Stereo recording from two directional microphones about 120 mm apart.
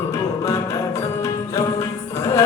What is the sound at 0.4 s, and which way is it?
Music, 25° left (ahead or behind).